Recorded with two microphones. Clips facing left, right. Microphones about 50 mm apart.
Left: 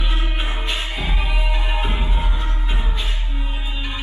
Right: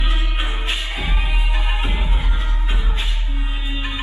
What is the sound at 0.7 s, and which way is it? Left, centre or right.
Music, right.